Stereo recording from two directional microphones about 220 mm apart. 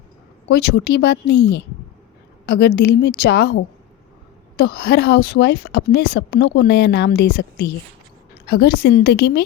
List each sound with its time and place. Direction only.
0.4 s speech: 50° left (ahead or behind)